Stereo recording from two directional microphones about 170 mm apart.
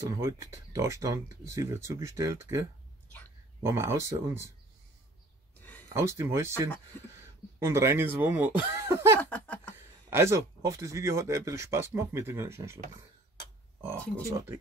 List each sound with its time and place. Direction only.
0.1 s speech: 20° right (ahead or behind)
3.6 s speech: 15° right (ahead or behind)
5.6 s a sound: 10° left (ahead or behind)
5.9 s speech: 15° right (ahead or behind)
9.2 s a sound: 10° left (ahead or behind)
9.8 s speech: 15° right (ahead or behind)